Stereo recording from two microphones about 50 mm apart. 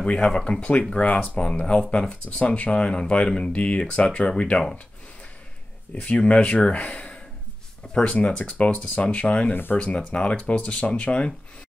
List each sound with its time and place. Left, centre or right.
0.0 s speech: centre
1.4 s speech: centre
6.0 s speech: left
7.8 s a sound: centre
8.4 s speech: left
9.5 s speech: left
9.8 s speech: left